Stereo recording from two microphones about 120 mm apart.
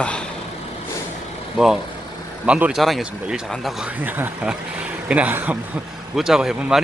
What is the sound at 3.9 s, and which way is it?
Speech, 15° right (ahead or behind).